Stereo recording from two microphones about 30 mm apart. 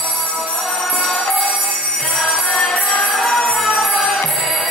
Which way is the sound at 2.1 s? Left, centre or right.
Centre.